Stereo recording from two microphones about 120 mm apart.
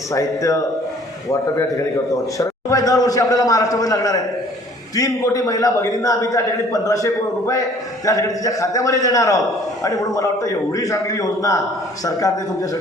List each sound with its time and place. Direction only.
0.1 s a man's voice: 25° left (ahead or behind)
2.4 s a man's voice: 30° left (ahead or behind)